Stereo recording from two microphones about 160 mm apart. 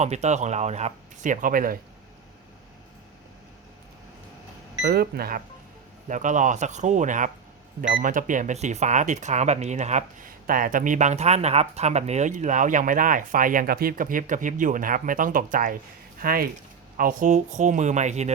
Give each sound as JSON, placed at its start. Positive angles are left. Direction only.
{"t": 0.0, "sound": "speech", "side_deg": -45}
{"t": 4.8, "sound": "speech", "side_deg": -85}
{"t": 6.1, "sound": "speech", "side_deg": -50}